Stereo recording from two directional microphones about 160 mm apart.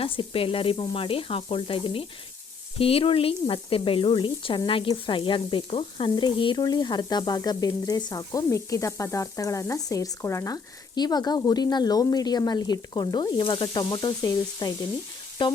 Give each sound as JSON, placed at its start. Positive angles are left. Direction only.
{"t": 0.0, "sound": "sizzle", "side_deg": 35}
{"t": 2.7, "sound": "speech", "side_deg": 35}